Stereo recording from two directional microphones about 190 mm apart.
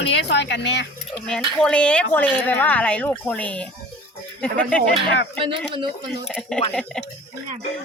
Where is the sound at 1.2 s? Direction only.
5° left (ahead or behind).